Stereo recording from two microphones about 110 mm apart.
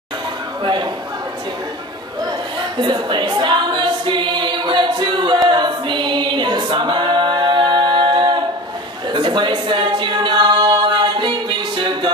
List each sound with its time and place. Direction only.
2.8 s choir: 45° right (ahead or behind)
9.1 s a capella: 45° right (ahead or behind)